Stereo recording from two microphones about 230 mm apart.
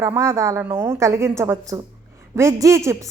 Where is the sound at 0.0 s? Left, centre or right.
Centre.